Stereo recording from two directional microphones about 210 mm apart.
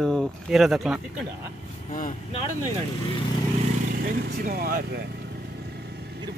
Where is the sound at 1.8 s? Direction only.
40° left (ahead or behind).